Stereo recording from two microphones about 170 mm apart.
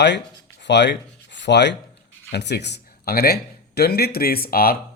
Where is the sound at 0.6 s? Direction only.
90° left.